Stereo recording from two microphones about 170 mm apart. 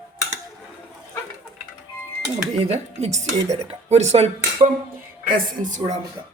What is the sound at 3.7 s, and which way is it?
Speech, 40° right (ahead or behind).